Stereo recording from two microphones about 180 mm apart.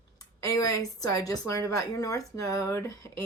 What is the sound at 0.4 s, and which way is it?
A woman's voice, 20° left (ahead or behind).